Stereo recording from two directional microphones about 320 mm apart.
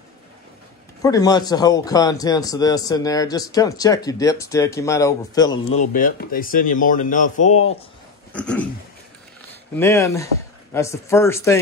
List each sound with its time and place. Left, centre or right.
1.0 s a man's voice: centre
5.9 s a man's voice: left
8.3 s a sound: centre
9.8 s a man's voice: centre